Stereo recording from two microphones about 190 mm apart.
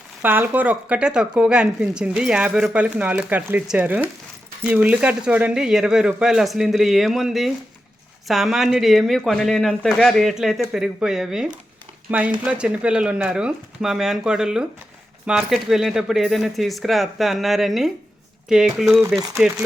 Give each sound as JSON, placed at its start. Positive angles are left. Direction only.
{"t": 0.2, "sound": "speech", "side_deg": -10}